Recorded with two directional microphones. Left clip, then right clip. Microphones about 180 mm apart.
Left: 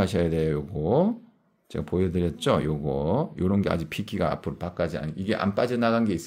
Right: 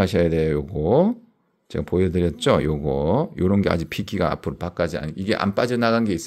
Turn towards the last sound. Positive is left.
turn(degrees=-35)  # may be behind; listen again after turning